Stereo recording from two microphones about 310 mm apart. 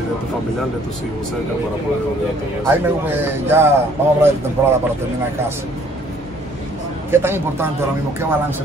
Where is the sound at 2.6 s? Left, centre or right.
Centre.